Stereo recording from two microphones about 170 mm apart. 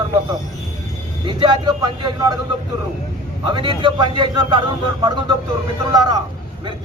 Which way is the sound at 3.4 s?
25° right (ahead or behind).